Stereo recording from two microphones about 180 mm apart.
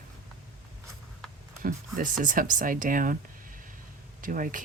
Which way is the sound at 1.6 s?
50° right (ahead or behind).